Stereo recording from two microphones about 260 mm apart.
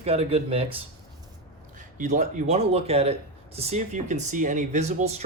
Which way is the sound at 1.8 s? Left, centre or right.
Right.